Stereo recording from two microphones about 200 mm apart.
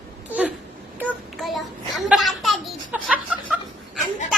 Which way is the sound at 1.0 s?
5° right (ahead or behind).